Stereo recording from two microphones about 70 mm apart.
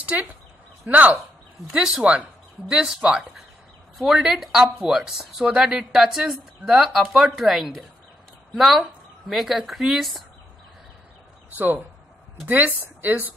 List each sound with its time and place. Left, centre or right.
0.0 s speech: centre
1.7 s a woman's voice: centre
11.5 s speech: right